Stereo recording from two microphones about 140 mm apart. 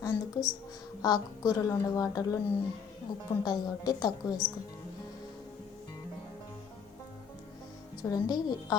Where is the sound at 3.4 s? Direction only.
25° left (ahead or behind).